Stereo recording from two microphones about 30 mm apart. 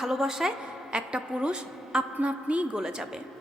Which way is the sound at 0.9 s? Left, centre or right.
Right.